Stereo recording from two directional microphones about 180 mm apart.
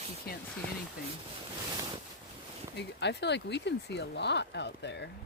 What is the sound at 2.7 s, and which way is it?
Speech, 70° left (ahead or behind).